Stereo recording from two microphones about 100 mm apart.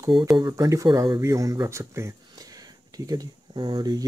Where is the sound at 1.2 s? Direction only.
30° right (ahead or behind).